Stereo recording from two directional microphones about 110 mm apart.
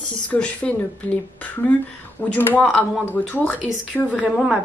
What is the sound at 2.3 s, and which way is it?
A woman's voice, 15° left (ahead or behind).